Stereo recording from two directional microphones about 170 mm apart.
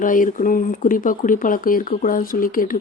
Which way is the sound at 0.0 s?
50° left (ahead or behind).